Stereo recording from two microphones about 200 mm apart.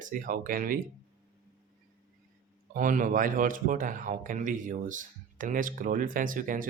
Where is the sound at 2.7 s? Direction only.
40° right (ahead or behind).